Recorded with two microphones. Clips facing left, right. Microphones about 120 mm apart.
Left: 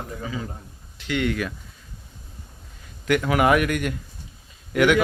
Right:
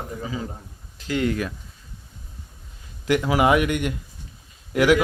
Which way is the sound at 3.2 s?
20° right (ahead or behind).